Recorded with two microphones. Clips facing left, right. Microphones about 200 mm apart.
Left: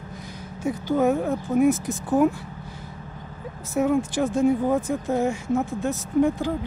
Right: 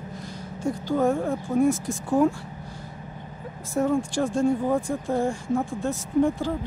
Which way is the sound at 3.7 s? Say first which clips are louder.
Left 2 dB; 5° left (ahead or behind).